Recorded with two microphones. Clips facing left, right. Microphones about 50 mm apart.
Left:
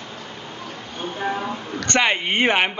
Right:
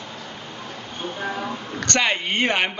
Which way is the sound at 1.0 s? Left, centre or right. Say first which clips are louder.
Left 3 dB; centre.